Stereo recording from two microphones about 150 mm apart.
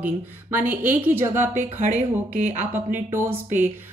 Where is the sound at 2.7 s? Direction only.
15° right (ahead or behind).